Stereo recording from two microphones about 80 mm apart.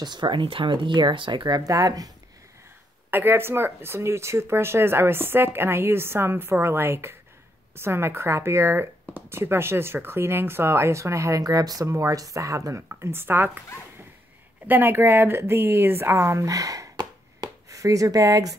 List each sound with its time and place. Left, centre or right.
0.0 s speech: right
1.6 s speech: right
3.1 s speech: right
13.0 s speech: right
14.7 s speech: right
16.9 s a sound: right